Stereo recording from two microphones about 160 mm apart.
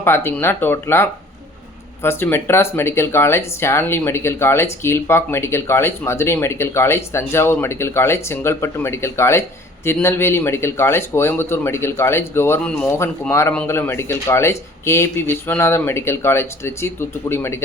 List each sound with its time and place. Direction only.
0.0 s speech: 15° left (ahead or behind)